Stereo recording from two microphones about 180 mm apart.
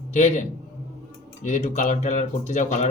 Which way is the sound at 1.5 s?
45° left (ahead or behind).